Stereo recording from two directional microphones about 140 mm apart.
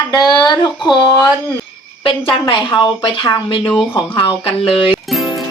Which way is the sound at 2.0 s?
35° left (ahead or behind).